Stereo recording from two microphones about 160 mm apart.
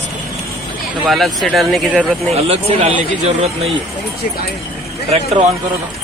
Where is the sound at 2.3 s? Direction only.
40° right (ahead or behind).